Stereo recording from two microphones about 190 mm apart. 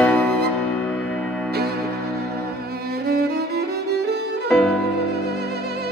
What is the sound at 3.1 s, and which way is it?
Music, 55° right (ahead or behind).